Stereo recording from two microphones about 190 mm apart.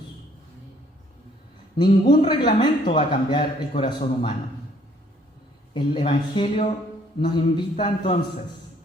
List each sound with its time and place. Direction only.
1.7 s a man's voice: 25° left (ahead or behind)
5.7 s a man's voice: 25° left (ahead or behind)